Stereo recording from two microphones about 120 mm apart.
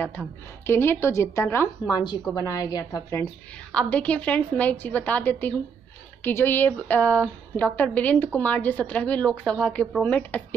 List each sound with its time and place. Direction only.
0.7 s a woman's voice: 20° left (ahead or behind)
1.9 s a woman's voice: 35° left (ahead or behind)
3.7 s a woman's voice: 10° left (ahead or behind)